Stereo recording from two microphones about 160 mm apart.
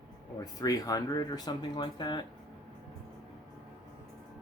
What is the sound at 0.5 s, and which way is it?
Speech, 20° left (ahead or behind).